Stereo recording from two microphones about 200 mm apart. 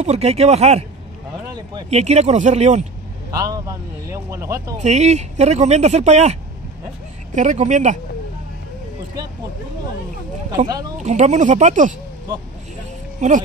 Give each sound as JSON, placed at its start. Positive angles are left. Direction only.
{"t": 0.0, "sound": "speech", "side_deg": -35}
{"t": 1.5, "sound": "speech", "side_deg": -20}
{"t": 1.9, "sound": "speech", "side_deg": -35}
{"t": 3.3, "sound": "a man's voice", "side_deg": -15}
{"t": 4.7, "sound": "speech", "side_deg": -35}
{"t": 7.3, "sound": "speech", "side_deg": -35}
{"t": 10.7, "sound": "speech", "side_deg": -20}
{"t": 11.0, "sound": "speech", "side_deg": -35}
{"t": 13.2, "sound": "speech", "side_deg": -35}